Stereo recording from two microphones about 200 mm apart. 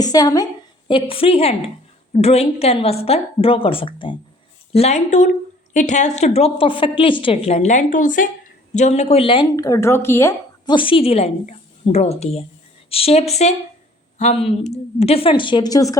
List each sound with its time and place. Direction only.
0.0 s a woman's voice: 20° left (ahead or behind)
10.8 s a woman's voice: 25° left (ahead or behind)